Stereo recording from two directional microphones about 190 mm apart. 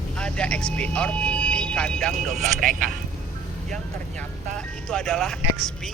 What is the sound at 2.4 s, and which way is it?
Speech, 45° right (ahead or behind).